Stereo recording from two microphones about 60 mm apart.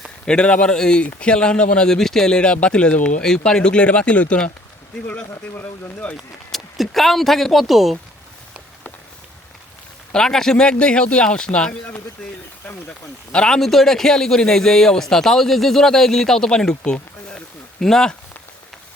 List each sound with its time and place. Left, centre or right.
0.3 s a man's voice: centre
5.3 s speech: left
6.5 s speech: centre
10.1 s a man's voice: centre
13.3 s a man's voice: centre